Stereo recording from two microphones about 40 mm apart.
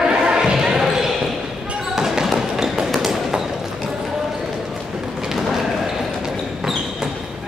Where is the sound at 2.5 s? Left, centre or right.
Centre.